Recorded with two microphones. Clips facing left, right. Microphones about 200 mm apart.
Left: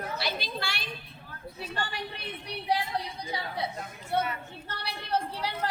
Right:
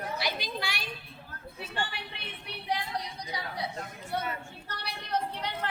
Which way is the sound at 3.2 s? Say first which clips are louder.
Left 3 dB; 25° left (ahead or behind).